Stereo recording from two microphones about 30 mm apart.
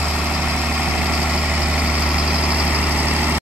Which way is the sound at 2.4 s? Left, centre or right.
Right.